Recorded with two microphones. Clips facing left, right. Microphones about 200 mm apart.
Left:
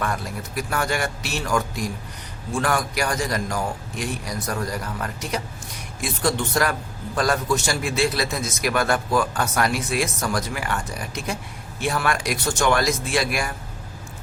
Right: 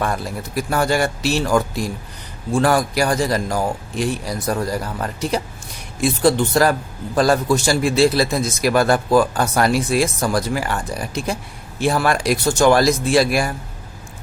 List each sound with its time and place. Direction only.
0.0 s a man's voice: 30° right (ahead or behind)